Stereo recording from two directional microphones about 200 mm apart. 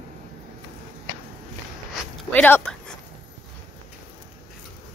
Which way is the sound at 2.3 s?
10° left (ahead or behind).